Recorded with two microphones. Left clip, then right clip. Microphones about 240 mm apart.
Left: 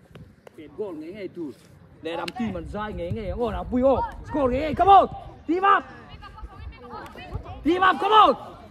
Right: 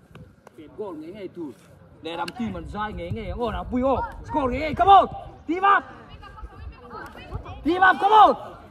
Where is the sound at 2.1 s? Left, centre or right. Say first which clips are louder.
Right 1 dB; right.